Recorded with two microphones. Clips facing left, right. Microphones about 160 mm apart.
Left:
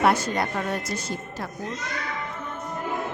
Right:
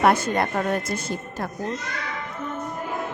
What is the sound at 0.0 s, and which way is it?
Speech, 50° right (ahead or behind).